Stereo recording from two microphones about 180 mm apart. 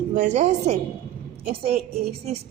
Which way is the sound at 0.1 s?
40° right (ahead or behind).